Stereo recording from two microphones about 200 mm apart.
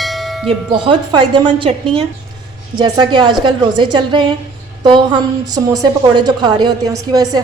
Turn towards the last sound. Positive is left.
turn(degrees=-20)  # may be behind; listen again after turning